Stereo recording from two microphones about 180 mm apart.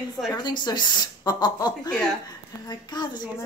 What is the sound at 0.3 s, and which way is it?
A woman's voice, 25° left (ahead or behind).